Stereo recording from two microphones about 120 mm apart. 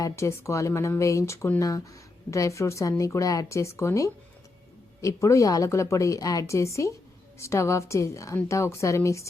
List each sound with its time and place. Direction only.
0.0 s speech: 25° left (ahead or behind)